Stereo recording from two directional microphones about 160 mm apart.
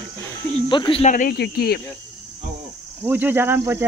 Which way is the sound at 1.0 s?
55° left (ahead or behind).